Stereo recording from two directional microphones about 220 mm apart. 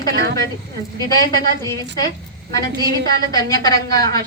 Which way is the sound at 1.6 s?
15° left (ahead or behind).